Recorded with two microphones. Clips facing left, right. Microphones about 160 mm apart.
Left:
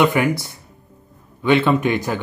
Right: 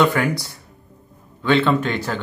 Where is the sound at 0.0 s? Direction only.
15° left (ahead or behind).